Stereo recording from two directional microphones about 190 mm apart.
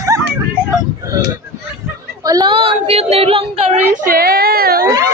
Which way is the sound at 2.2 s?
20° right (ahead or behind).